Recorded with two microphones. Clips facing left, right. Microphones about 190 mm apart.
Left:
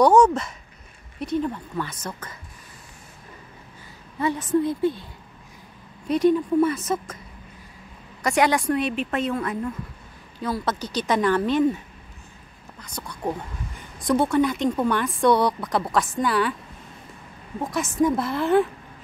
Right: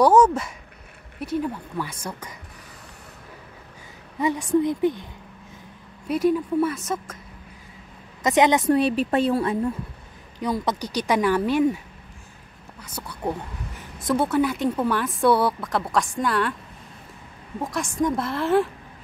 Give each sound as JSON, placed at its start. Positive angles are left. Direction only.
{"t": 0.0, "sound": "a woman's voice", "side_deg": -5}
{"t": 4.2, "sound": "a woman's voice", "side_deg": -15}
{"t": 6.0, "sound": "speech", "side_deg": -5}
{"t": 8.2, "sound": "a woman's voice", "side_deg": -20}
{"t": 8.7, "sound": "speech", "side_deg": -35}
{"t": 10.4, "sound": "a woman's voice", "side_deg": -15}
{"t": 12.8, "sound": "speech", "side_deg": -5}
{"t": 17.6, "sound": "speech", "side_deg": 0}